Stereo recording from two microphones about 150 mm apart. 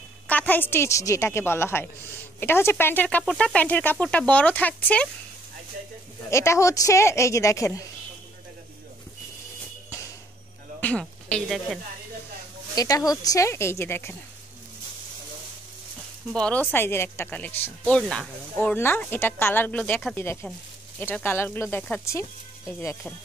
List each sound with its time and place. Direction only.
0.3 s speech: 10° left (ahead or behind)
6.3 s speech: 20° left (ahead or behind)
10.8 s a woman's voice: 10° left (ahead or behind)
12.7 s speech: 25° left (ahead or behind)
16.3 s speech: 5° left (ahead or behind)
18.6 s speech: 15° left (ahead or behind)
20.2 s speech: 15° left (ahead or behind)